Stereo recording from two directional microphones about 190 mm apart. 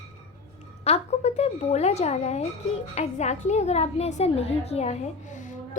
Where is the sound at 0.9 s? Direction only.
35° left (ahead or behind).